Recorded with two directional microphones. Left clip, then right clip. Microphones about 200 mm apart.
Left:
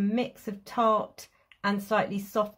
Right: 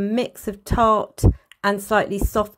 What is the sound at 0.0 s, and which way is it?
Speech, 45° right (ahead or behind).